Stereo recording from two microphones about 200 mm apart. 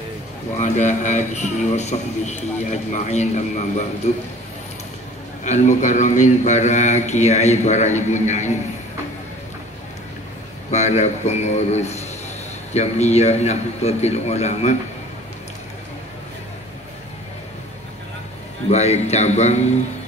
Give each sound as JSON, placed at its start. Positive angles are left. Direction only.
{"t": 0.6, "sound": "a man's voice", "side_deg": 35}
{"t": 5.4, "sound": "a man's voice", "side_deg": 35}
{"t": 10.7, "sound": "a man's voice", "side_deg": 35}
{"t": 18.7, "sound": "a man's voice", "side_deg": 35}